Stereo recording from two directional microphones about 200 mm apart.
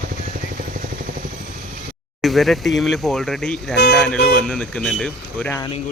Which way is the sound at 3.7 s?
55° left (ahead or behind).